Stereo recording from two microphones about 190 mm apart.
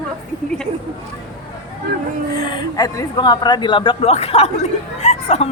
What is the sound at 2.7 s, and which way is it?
A woman's voice, 20° left (ahead or behind).